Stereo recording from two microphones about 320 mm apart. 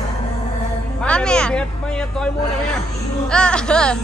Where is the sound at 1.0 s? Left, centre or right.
Centre.